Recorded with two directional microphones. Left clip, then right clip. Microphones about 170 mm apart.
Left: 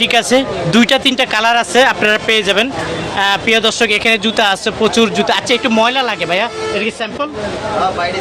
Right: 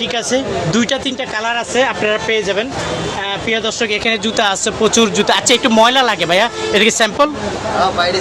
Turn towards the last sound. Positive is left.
turn(degrees=-25)  # may be behind; listen again after turning